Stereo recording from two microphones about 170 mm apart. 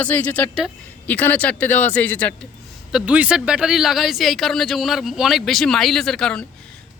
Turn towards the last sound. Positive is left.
turn(degrees=5)  # may be behind; listen again after turning